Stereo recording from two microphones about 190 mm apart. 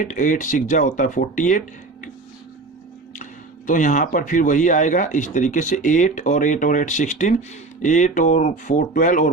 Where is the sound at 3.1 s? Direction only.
40° left (ahead or behind).